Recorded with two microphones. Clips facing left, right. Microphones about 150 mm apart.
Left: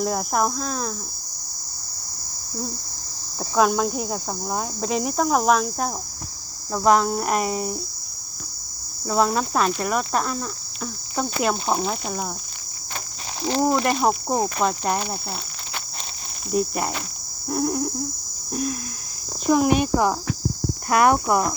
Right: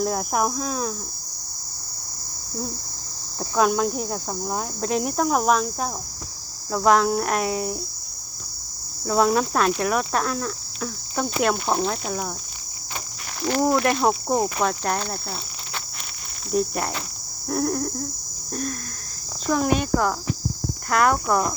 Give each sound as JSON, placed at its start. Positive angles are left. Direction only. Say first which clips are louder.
{"t": 0.0, "sound": "speech", "louder": "even", "side_deg": 0}
{"t": 3.5, "sound": "speech", "louder": "left 1 dB", "side_deg": 0}
{"t": 9.0, "sound": "speech", "louder": "right 1 dB", "side_deg": 0}
{"t": 13.4, "sound": "speech", "louder": "even", "side_deg": 20}
{"t": 14.0, "sound": "speech", "louder": "even", "side_deg": 5}